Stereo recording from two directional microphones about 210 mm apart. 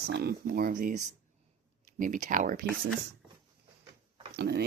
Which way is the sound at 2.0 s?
40° right (ahead or behind).